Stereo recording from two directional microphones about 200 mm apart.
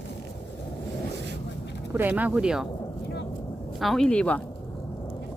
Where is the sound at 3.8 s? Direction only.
Centre (ahead or behind).